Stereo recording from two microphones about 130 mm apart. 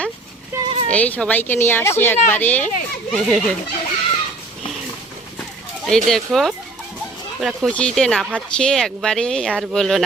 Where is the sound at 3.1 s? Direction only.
Centre (ahead or behind).